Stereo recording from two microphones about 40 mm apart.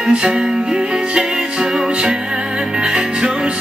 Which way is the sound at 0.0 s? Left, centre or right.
Right.